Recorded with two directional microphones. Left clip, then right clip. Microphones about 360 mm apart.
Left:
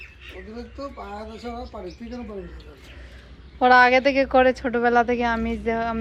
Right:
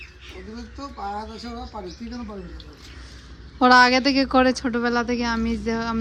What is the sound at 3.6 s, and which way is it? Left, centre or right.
Speech, centre.